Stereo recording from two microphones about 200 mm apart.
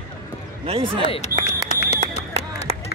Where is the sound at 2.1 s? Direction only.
35° left (ahead or behind).